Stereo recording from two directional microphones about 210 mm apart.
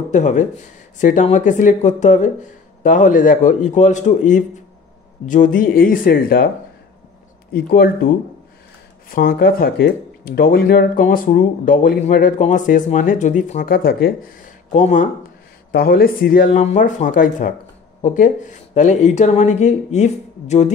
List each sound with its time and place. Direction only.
0.1 s speech: 35° left (ahead or behind)
7.5 s speech: 45° left (ahead or behind)
9.1 s speech: 40° left (ahead or behind)
14.7 s speech: 35° left (ahead or behind)
15.7 s speech: 45° left (ahead or behind)